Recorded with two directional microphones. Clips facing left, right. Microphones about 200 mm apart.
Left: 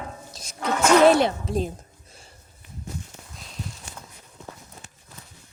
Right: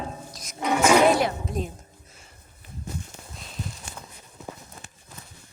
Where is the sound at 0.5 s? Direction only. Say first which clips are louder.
Left 1 dB; 15° right (ahead or behind).